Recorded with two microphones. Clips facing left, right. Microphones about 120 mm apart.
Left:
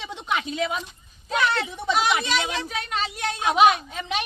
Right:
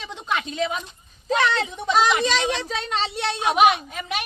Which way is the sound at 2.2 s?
30° right (ahead or behind).